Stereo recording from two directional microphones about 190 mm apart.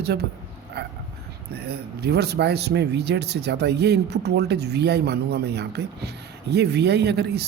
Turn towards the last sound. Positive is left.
turn(degrees=-60)  # may be behind; listen again after turning